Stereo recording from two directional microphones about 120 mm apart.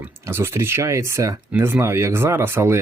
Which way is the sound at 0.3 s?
20° right (ahead or behind).